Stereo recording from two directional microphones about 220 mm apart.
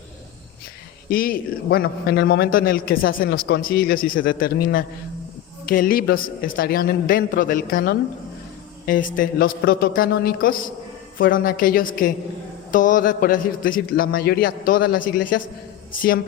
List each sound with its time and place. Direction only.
1.1 s a man's voice: 40° left (ahead or behind)
15.2 s a man's voice: 90° left